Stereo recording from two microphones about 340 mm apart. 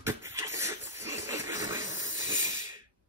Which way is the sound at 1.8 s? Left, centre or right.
Centre.